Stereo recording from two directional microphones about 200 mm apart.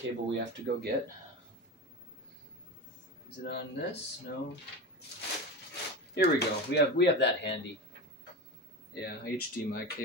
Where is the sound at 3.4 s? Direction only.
55° left (ahead or behind).